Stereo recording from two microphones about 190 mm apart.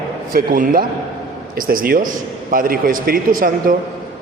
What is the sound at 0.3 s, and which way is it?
A man's voice, 50° right (ahead or behind).